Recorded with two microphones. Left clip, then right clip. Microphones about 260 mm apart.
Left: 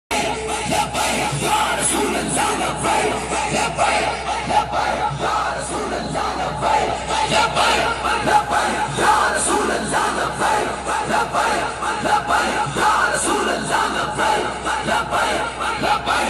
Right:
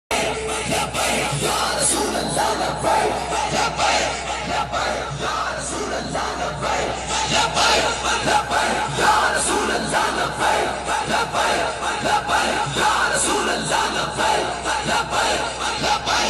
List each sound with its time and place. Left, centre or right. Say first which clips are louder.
0.7 s music: left 2 dB; centre
3.5 s a sound: left 1 dB; centre
7.2 s crowd: left 2 dB; centre
9.0 s music: left 1 dB; left
12.1 s crowd: left 1 dB; left
13.3 s music: left 1 dB; left
15.8 s a sound: left 1 dB; left